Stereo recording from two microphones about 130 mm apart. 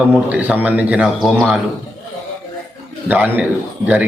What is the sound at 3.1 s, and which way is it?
Speech, 15° right (ahead or behind).